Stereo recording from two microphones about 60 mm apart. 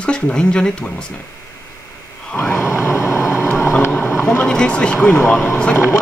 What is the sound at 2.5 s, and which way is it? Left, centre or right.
Vehicle, left.